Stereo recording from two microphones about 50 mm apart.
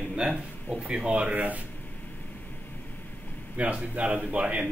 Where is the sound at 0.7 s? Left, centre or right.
Right.